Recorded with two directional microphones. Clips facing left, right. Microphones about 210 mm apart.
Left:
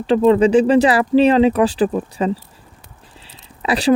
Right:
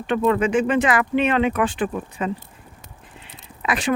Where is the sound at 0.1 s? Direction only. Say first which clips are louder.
Left 7 dB; 30° left (ahead or behind).